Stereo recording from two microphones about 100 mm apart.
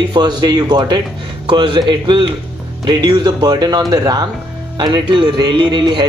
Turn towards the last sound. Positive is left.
turn(degrees=-50)  # may be behind; listen again after turning